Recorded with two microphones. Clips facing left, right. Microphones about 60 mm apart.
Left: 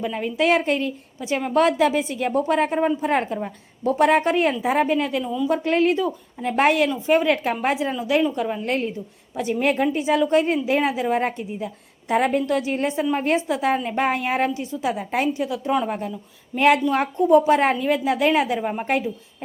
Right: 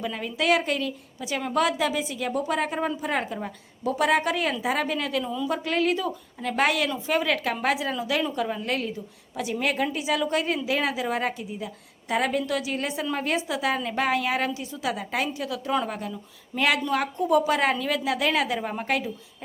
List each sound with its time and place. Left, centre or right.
0.0 s a woman's voice: left
1.5 s a woman's voice: left
5.2 s a woman's voice: centre
5.5 s a woman's voice: left
8.6 s a woman's voice: left
11.3 s a woman's voice: left